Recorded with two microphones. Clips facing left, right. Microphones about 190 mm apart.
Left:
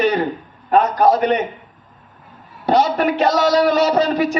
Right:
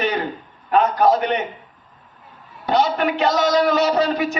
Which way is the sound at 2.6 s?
40° left (ahead or behind).